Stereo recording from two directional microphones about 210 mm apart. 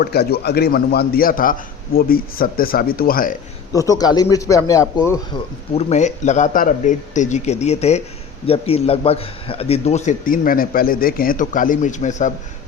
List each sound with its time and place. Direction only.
0.0 s a man's voice: 50° left (ahead or behind)
3.7 s a man's voice: 15° left (ahead or behind)
5.7 s a man's voice: 35° left (ahead or behind)